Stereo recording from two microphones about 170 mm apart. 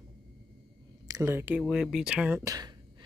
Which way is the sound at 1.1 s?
15° right (ahead or behind).